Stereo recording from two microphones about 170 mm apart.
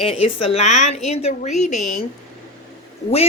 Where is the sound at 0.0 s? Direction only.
35° left (ahead or behind).